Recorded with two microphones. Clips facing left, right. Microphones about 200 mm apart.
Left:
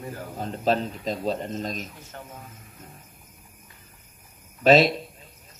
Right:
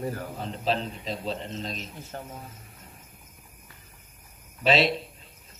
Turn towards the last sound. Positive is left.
turn(degrees=45)  # may be behind; listen again after turning